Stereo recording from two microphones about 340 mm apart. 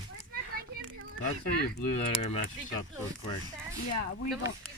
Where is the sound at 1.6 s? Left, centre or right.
Left.